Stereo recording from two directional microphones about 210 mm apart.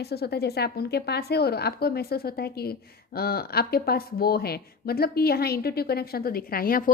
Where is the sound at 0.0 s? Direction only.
50° left (ahead or behind).